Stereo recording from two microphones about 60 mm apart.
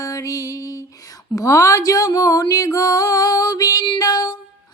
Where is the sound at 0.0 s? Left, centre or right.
Left.